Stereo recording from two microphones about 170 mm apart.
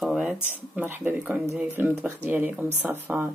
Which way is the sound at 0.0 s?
Centre (ahead or behind).